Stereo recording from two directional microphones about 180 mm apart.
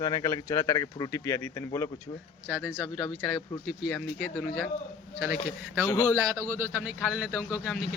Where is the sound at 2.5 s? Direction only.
5° right (ahead or behind).